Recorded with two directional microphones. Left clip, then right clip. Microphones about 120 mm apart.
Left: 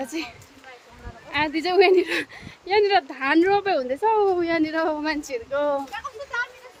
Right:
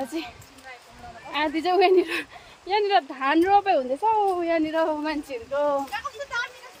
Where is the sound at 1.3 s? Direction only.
30° left (ahead or behind).